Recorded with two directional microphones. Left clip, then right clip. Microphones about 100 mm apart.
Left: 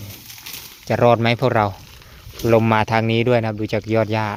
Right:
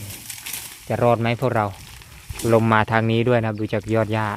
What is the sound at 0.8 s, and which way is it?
Speech, 45° left (ahead or behind).